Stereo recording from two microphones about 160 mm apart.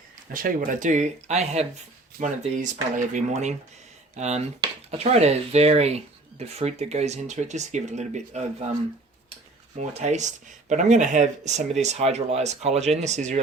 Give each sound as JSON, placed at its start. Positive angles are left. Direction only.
{"t": 0.3, "sound": "speech", "side_deg": -60}
{"t": 10.0, "sound": "speech", "side_deg": -50}